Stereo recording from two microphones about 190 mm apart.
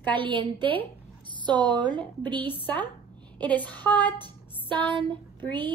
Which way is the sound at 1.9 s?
10° left (ahead or behind).